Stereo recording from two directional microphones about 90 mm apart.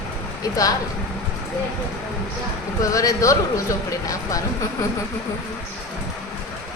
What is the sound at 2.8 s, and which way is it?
Speech, 40° left (ahead or behind).